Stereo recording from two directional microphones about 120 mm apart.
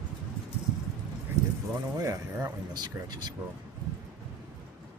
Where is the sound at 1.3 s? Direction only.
20° right (ahead or behind).